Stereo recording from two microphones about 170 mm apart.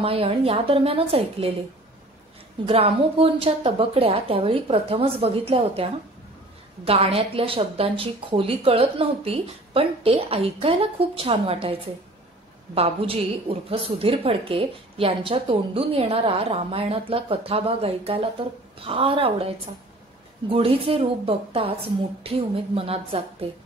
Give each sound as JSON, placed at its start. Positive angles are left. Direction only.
{"t": 0.0, "sound": "a woman's voice", "side_deg": -35}
{"t": 2.6, "sound": "a woman's voice", "side_deg": -35}
{"t": 20.4, "sound": "a woman's voice", "side_deg": -35}